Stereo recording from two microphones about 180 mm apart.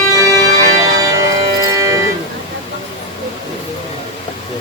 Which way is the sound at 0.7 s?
20° right (ahead or behind).